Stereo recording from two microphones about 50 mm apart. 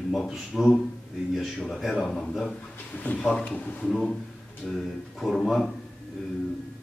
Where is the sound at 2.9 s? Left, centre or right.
Left.